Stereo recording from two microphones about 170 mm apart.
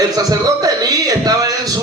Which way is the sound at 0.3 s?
20° right (ahead or behind).